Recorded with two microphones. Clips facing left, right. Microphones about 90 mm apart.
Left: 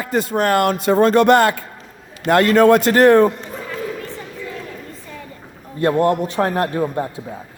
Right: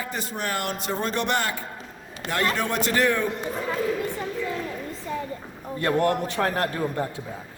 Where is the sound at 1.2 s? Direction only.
90° left.